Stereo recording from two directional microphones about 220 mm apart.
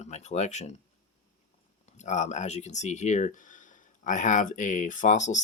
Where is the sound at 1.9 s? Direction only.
30° left (ahead or behind).